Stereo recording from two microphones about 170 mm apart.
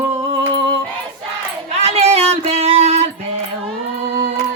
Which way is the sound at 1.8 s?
40° right (ahead or behind).